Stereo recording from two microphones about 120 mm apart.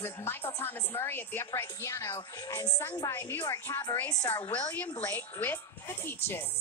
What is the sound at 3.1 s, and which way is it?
A woman's voice, 20° left (ahead or behind).